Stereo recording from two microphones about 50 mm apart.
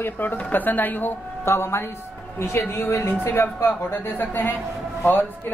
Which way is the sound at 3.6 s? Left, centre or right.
Left.